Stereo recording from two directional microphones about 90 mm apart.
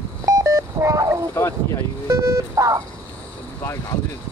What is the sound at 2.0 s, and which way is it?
Vehicle, 35° right (ahead or behind).